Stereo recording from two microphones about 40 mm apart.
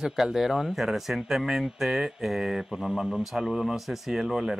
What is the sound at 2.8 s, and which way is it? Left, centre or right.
A man's voice, centre.